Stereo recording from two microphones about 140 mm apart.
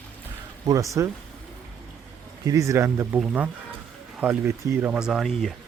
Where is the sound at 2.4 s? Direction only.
25° right (ahead or behind).